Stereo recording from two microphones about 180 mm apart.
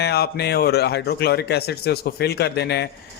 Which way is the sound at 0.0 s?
65° left (ahead or behind).